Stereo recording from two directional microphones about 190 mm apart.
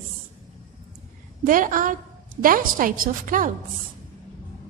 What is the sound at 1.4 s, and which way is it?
A woman's voice, 45° right (ahead or behind).